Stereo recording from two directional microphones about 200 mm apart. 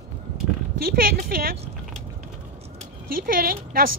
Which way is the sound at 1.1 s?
45° right (ahead or behind).